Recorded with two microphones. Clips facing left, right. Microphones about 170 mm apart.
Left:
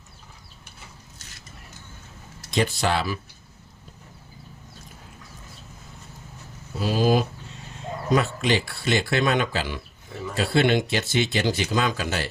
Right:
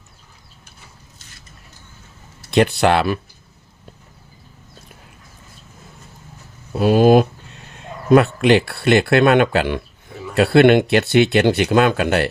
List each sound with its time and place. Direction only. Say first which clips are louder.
2.5 s speech: right 9 dB; 65° right (ahead or behind)
6.7 s speech: right 9 dB; 60° right (ahead or behind)